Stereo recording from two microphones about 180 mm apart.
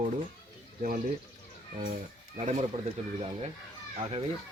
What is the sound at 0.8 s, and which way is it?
Speech, 50° right (ahead or behind).